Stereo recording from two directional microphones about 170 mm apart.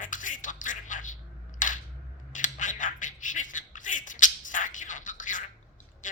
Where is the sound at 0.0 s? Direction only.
50° left (ahead or behind).